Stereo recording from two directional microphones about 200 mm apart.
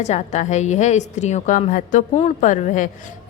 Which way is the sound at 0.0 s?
35° left (ahead or behind).